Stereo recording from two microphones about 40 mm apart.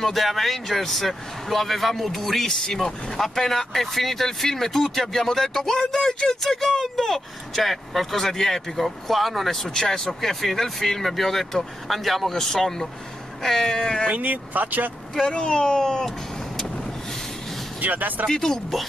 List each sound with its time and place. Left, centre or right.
0.0 s speech: centre
14.0 s speech: right
15.2 s speech: centre
16.5 s vehicle: centre
17.7 s speech: right
18.3 s speech: centre